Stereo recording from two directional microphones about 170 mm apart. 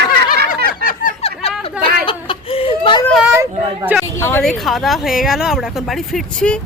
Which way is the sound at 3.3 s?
15° right (ahead or behind).